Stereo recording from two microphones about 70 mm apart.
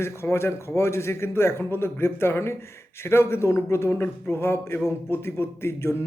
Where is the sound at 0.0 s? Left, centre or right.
Left.